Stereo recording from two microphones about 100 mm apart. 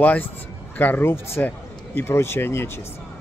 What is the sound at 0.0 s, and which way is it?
A man's voice, 15° left (ahead or behind).